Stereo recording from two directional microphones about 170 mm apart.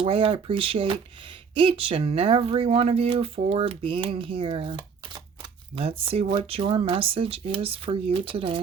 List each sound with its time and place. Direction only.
0.0 s speech: 30° right (ahead or behind)